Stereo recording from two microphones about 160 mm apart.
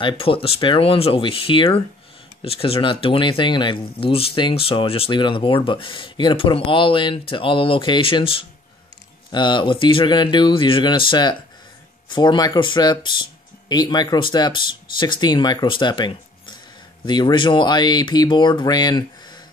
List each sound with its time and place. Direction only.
0.0 s speech: 35° left (ahead or behind)